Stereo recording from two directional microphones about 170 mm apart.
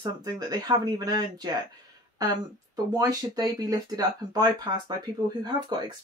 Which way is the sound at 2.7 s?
20° right (ahead or behind).